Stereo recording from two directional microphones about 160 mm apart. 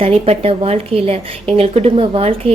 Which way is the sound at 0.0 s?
40° right (ahead or behind).